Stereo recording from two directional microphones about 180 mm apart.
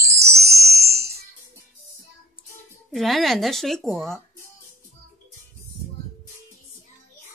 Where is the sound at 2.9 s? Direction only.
Centre (ahead or behind).